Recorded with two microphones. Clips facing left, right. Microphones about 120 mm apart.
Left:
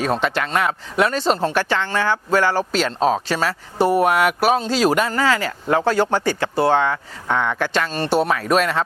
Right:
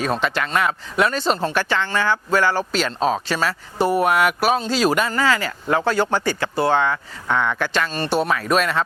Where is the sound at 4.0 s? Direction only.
55° left (ahead or behind).